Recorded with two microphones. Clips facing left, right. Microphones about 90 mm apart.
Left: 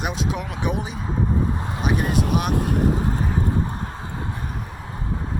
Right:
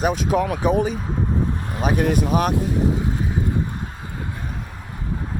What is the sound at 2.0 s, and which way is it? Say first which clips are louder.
Speech: right 6 dB; 50° right (ahead or behind).